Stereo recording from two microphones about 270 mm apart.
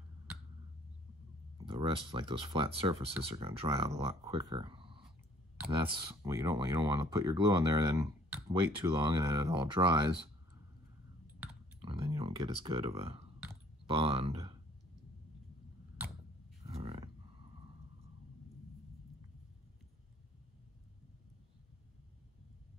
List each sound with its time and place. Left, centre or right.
1.7 s speech: centre
11.2 s a sound: centre
11.8 s speech: centre